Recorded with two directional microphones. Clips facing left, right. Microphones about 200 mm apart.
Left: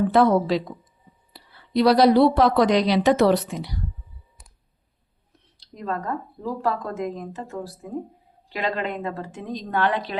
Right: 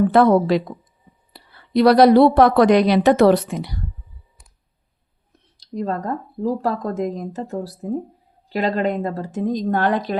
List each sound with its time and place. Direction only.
0.1 s a woman's voice: 60° right (ahead or behind)
5.5 s a woman's voice: 40° right (ahead or behind)